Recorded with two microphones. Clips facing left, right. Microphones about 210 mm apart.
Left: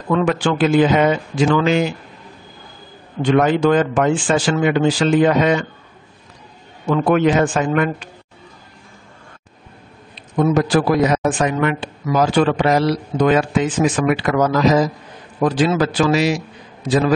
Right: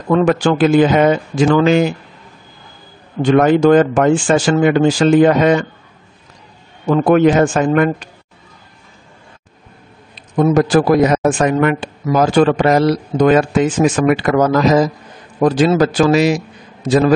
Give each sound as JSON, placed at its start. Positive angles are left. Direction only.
{"t": 0.1, "sound": "a man's voice", "side_deg": -40}
{"t": 3.3, "sound": "a man's voice", "side_deg": -45}
{"t": 6.9, "sound": "a man's voice", "side_deg": -45}
{"t": 10.3, "sound": "a man's voice", "side_deg": -45}